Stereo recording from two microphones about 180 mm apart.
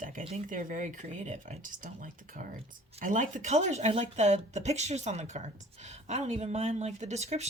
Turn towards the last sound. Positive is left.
turn(degrees=-40)  # may be behind; listen again after turning